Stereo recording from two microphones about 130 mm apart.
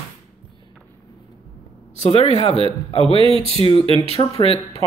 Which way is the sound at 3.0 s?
45° right (ahead or behind).